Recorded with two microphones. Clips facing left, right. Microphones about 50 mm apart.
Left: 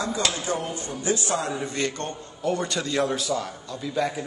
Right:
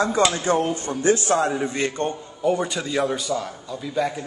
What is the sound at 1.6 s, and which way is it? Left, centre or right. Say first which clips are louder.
A man's voice: right 4 dB; right.